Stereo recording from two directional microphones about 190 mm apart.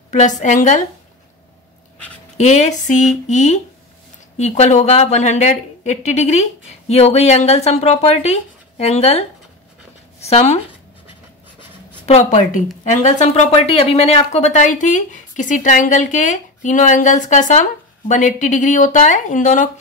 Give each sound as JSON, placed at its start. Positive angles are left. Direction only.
{"t": 0.4, "sound": "speech", "side_deg": 40}
{"t": 2.3, "sound": "speech", "side_deg": 35}
{"t": 10.2, "sound": "speech", "side_deg": 35}
{"t": 12.1, "sound": "speech", "side_deg": 35}